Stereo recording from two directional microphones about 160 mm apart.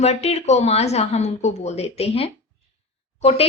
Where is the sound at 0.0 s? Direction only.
40° left (ahead or behind).